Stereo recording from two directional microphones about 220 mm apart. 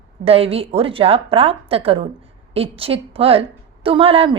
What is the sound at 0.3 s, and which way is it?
A woman's voice, 25° right (ahead or behind).